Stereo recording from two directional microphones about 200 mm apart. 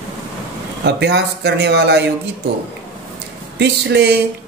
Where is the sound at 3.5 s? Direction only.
60° right (ahead or behind).